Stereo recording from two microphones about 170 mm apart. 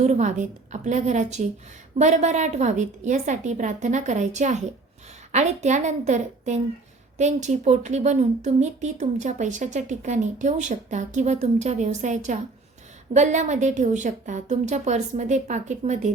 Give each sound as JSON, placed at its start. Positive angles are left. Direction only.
{"t": 0.0, "sound": "speech", "side_deg": -45}